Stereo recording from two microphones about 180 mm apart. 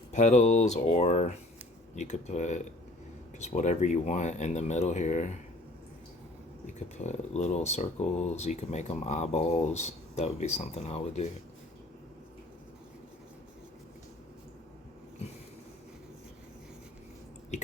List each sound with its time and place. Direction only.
0.1 s speech: 40° left (ahead or behind)
6.7 s speech: 40° left (ahead or behind)